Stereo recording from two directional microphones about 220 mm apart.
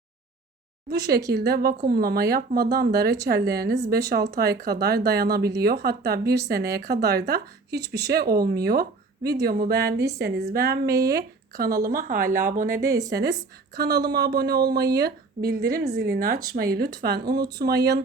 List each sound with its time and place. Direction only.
0.9 s speech: 45° right (ahead or behind)
12.8 s speech: 15° right (ahead or behind)
13.1 s speech: 50° right (ahead or behind)
17.2 s speech: 20° right (ahead or behind)
17.6 s speech: 50° right (ahead or behind)